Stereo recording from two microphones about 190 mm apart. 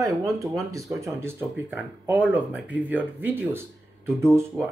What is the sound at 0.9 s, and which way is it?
Speech, 15° right (ahead or behind).